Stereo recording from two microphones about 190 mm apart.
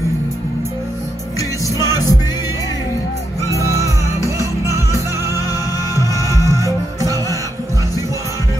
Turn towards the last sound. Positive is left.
turn(degrees=-15)  # may be behind; listen again after turning